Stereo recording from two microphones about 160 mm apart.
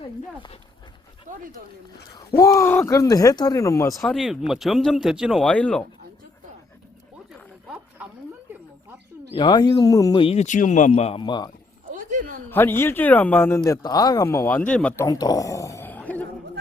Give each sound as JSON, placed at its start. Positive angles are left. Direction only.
{"t": 1.3, "sound": "a sound", "side_deg": -55}
{"t": 2.4, "sound": "speech", "side_deg": 15}
{"t": 3.9, "sound": "speech", "side_deg": 0}
{"t": 9.3, "sound": "speech", "side_deg": 25}
{"t": 10.2, "sound": "speech", "side_deg": 45}
{"t": 11.9, "sound": "a sound", "side_deg": -55}
{"t": 12.5, "sound": "a man's voice", "side_deg": 15}
{"t": 13.6, "sound": "speech", "side_deg": 25}
{"t": 15.0, "sound": "a sound", "side_deg": 25}